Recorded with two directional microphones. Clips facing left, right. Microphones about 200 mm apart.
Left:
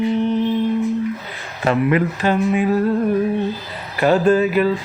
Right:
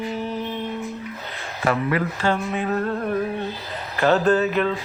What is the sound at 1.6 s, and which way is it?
Speech, 25° left (ahead or behind).